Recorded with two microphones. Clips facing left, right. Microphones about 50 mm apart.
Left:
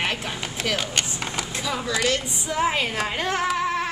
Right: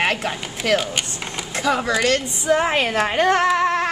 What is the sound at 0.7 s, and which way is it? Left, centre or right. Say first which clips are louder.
Speech: right 8 dB; centre.